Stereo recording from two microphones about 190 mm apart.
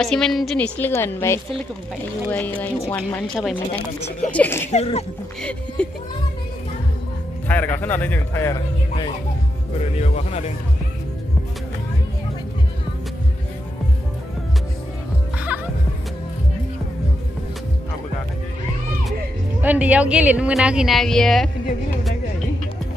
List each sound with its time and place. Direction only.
0.0 s a woman's voice: centre (ahead or behind)
4.6 s a man's voice: 35° left (ahead or behind)
5.4 s a woman's voice: 5° left (ahead or behind)
7.4 s a woman's voice: 10° left (ahead or behind)
9.9 s a man's voice: 35° left (ahead or behind)
19.6 s a woman's voice: 10° right (ahead or behind)